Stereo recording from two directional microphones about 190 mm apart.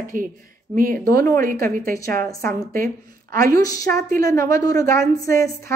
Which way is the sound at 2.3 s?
15° left (ahead or behind).